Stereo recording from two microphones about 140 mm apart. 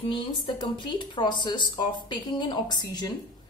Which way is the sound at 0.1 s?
35° left (ahead or behind).